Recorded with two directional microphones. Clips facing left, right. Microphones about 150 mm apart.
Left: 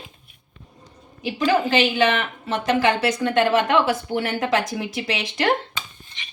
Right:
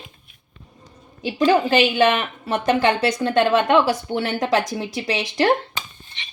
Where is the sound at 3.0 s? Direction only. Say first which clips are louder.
Right 1 dB; 30° right (ahead or behind).